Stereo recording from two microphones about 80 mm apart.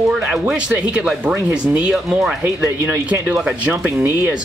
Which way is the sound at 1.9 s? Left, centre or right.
Centre.